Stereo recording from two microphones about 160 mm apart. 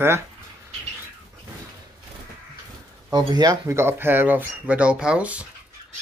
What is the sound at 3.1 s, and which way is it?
Speech, 25° right (ahead or behind).